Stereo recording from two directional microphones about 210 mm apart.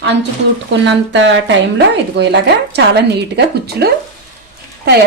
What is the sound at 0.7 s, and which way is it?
Speech, 60° right (ahead or behind).